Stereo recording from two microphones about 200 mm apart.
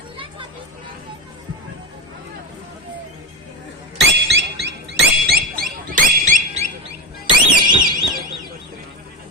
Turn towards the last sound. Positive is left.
turn(degrees=-25)  # may be behind; listen again after turning